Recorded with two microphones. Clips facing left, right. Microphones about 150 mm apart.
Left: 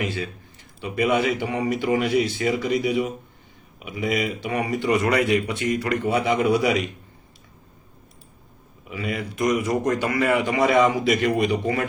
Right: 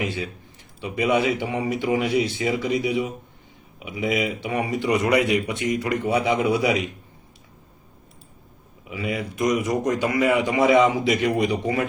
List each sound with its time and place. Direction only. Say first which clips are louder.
0.0 s speech: even; 20° right (ahead or behind)
8.9 s speech: right 1 dB; 20° right (ahead or behind)